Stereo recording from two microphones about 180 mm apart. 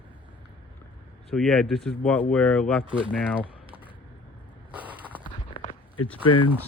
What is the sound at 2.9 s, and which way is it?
Speech, 5° right (ahead or behind).